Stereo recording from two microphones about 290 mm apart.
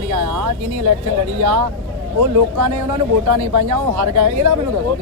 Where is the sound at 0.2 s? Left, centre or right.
Right.